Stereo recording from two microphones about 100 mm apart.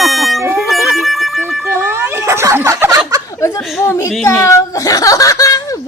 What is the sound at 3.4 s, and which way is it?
Speech, 25° left (ahead or behind).